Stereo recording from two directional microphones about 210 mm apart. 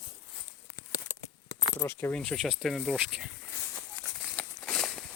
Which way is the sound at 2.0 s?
5° left (ahead or behind).